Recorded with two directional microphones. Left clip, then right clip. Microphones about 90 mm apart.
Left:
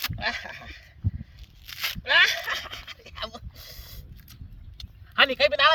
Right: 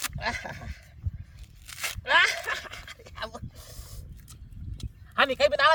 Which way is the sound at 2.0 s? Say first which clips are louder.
Left 2 dB; 15° left (ahead or behind).